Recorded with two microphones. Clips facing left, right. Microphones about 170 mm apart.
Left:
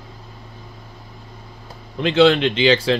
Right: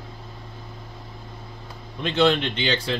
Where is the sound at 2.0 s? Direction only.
90° left.